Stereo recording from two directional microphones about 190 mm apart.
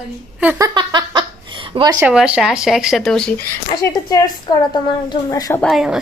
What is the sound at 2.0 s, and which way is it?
A woman's voice, 5° right (ahead or behind).